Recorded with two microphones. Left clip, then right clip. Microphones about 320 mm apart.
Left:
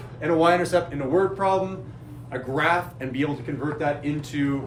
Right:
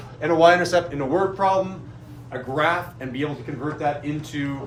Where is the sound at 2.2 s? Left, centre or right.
Centre.